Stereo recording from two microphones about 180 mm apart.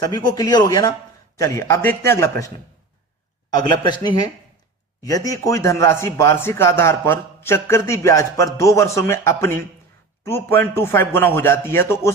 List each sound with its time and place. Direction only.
0.0 s a man's voice: 20° left (ahead or behind)
5.0 s a man's voice: 20° left (ahead or behind)